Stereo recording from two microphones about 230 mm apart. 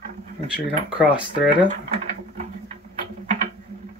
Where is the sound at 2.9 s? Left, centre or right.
Right.